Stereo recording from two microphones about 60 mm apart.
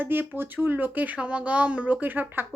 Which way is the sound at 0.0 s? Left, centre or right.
Right.